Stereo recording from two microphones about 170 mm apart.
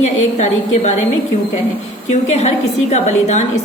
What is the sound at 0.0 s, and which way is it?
Speech, 45° left (ahead or behind).